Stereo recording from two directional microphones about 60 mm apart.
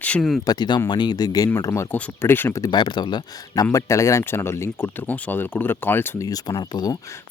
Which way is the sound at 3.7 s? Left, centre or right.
Left.